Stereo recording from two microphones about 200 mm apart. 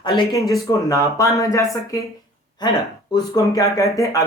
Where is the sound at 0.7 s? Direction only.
15° left (ahead or behind).